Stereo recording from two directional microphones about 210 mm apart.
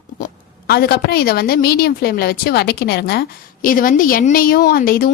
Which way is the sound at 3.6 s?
40° left (ahead or behind).